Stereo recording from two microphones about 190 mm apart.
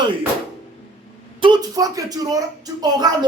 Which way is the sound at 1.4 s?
20° right (ahead or behind).